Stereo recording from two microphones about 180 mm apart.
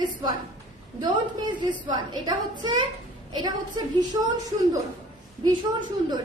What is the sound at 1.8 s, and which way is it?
A woman's voice, 25° right (ahead or behind).